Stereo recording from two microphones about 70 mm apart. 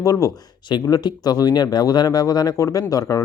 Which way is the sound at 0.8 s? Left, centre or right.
Left.